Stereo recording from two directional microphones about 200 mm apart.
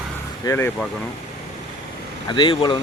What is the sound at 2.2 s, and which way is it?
Speech, 25° left (ahead or behind).